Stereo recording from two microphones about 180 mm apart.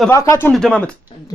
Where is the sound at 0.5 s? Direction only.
5° left (ahead or behind).